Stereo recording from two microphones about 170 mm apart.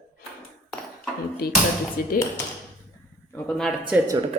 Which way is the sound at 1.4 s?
65° left (ahead or behind).